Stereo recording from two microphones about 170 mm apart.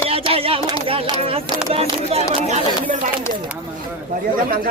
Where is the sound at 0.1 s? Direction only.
35° right (ahead or behind).